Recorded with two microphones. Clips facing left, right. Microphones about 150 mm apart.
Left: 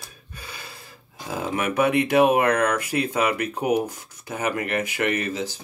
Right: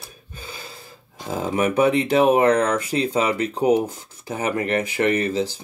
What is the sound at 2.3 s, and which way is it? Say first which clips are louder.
Speech: right 3 dB; 30° right (ahead or behind).